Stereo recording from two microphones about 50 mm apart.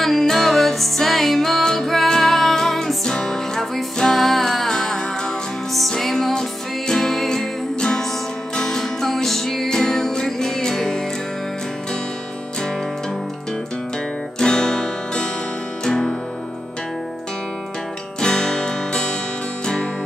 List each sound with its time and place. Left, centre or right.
0.0 s music: centre
14.4 s music: centre
18.2 s music: centre